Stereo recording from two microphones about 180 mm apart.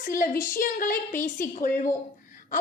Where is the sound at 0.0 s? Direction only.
45° left (ahead or behind).